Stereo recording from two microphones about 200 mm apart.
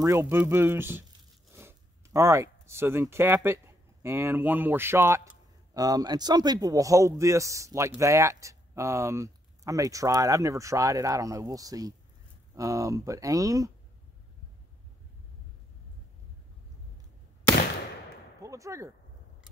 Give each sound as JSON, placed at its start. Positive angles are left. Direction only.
{"t": 0.0, "sound": "speech", "side_deg": -15}
{"t": 18.4, "sound": "slam", "side_deg": -15}